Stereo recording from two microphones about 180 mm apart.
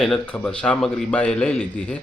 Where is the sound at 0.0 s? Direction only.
5° left (ahead or behind).